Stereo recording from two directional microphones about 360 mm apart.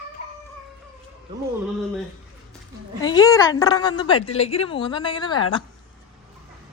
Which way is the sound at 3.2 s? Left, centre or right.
Centre.